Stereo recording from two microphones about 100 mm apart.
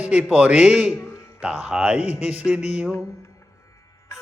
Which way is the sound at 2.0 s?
90° left.